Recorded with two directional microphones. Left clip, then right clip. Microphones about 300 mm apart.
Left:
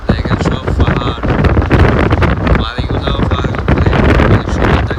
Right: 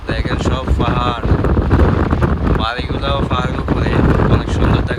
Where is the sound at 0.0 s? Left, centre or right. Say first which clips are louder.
Left 4 dB; centre.